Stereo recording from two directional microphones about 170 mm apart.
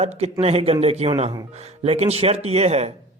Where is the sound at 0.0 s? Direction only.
40° right (ahead or behind).